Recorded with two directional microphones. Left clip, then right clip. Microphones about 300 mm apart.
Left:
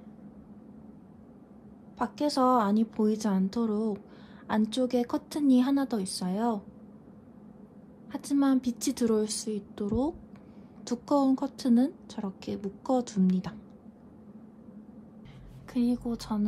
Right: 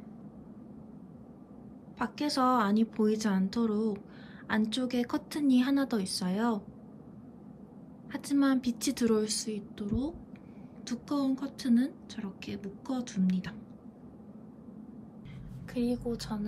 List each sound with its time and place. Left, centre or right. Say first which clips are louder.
2.0 s a woman's voice: left 3 dB; centre
8.1 s a woman's voice: left 2 dB; centre
15.7 s a woman's voice: left 2 dB; centre